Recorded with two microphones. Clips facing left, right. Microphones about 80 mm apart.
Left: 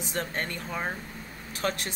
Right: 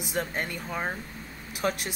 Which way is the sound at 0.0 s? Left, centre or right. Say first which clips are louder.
Right 1 dB; centre.